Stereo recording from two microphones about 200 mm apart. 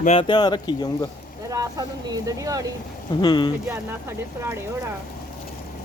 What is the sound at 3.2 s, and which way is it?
Speech, 20° left (ahead or behind).